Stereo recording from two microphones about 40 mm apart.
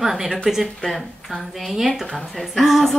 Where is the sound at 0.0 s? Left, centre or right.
Centre.